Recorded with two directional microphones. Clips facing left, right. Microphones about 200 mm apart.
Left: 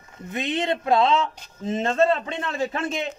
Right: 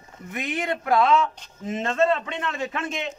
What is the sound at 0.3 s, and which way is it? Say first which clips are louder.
A man's voice: left 3 dB; 25° left (ahead or behind).